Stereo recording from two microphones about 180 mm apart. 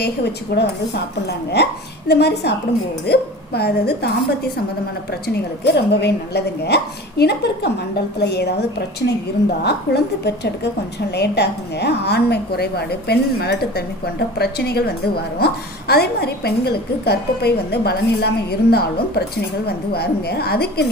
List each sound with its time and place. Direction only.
0.5 s a woman's voice: 65° left (ahead or behind)